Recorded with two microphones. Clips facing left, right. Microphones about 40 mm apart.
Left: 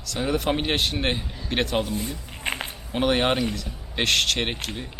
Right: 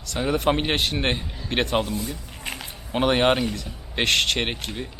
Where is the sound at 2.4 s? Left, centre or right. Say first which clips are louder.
Left 7 dB; left.